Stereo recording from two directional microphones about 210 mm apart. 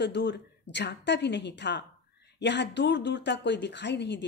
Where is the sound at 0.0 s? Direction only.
55° left (ahead or behind).